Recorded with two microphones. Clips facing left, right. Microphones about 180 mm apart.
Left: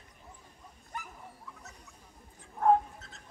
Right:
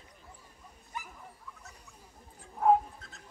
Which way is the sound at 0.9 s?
55° left (ahead or behind).